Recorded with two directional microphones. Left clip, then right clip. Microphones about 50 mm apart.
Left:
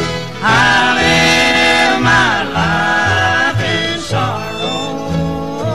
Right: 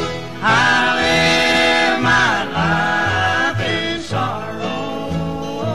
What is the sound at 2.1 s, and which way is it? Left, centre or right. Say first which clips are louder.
Music: left 3 dB; centre.